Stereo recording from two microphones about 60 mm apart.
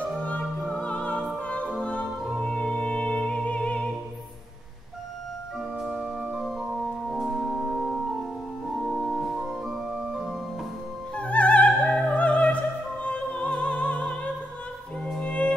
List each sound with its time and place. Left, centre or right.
0.2 s opera: left
1.5 s music: centre
6.4 s organ: centre
8.9 s music: centre
9.4 s organ: centre
11.1 s music: left
11.6 s opera: centre
15.1 s music: centre